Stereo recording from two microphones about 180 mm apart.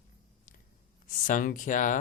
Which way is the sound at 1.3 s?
45° left (ahead or behind).